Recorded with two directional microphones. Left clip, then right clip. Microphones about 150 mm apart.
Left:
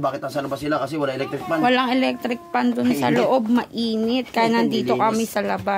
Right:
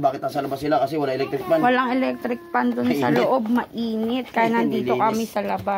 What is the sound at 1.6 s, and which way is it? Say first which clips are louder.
Speech: left 1 dB; 20° left (ahead or behind).